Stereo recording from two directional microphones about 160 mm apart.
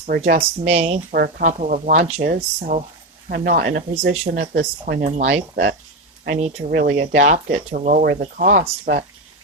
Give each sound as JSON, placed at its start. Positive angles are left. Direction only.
{"t": 0.1, "sound": "speech", "side_deg": -75}
{"t": 0.6, "sound": "speech", "side_deg": -40}
{"t": 1.1, "sound": "speech", "side_deg": -70}
{"t": 1.5, "sound": "speech", "side_deg": -50}
{"t": 4.1, "sound": "speech", "side_deg": -45}
{"t": 4.5, "sound": "speech", "side_deg": -65}
{"t": 5.0, "sound": "speech", "side_deg": -45}
{"t": 6.7, "sound": "speech", "side_deg": -85}
{"t": 7.0, "sound": "speech", "side_deg": -50}